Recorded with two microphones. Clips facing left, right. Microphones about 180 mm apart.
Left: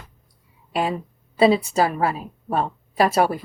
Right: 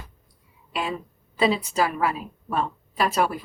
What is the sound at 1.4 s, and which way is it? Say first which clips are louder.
A woman's voice: left 5 dB; 30° left (ahead or behind).